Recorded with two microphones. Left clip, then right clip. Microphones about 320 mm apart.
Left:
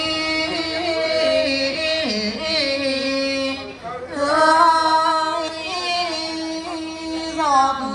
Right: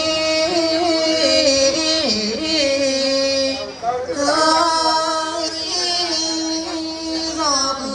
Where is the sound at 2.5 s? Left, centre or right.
Centre.